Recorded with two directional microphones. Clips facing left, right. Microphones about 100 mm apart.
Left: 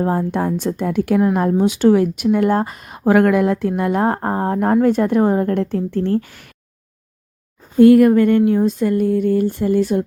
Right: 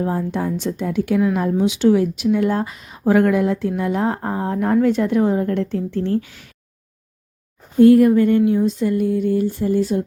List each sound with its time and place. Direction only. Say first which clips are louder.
0.0 s speech: left 3 dB; 50° left (ahead or behind)
7.8 s speech: left 2 dB; 70° left (ahead or behind)